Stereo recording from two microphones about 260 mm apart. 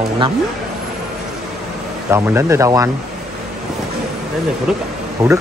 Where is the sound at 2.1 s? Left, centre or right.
Centre.